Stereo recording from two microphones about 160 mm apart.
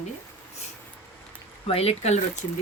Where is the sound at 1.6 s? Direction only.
40° left (ahead or behind).